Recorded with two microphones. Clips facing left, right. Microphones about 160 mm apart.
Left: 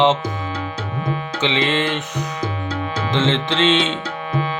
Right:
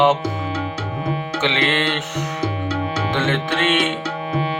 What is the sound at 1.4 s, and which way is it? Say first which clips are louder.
Music: left 1 dB; 15° left (ahead or behind).